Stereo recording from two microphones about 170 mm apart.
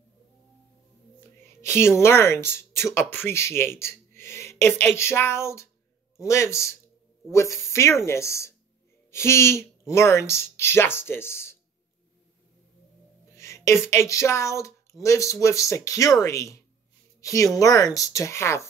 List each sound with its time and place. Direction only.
1.6 s speech: 15° left (ahead or behind)
13.4 s speech: 15° left (ahead or behind)